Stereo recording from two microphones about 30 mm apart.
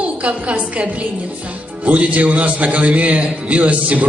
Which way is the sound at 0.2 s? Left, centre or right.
Right.